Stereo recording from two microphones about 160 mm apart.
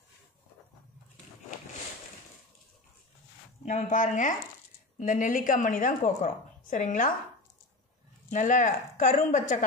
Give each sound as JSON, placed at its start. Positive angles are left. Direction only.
{"t": 3.6, "sound": "a woman's voice", "side_deg": 50}
{"t": 8.3, "sound": "speech", "side_deg": 55}